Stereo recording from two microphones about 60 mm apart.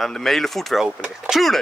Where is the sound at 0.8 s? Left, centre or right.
Centre.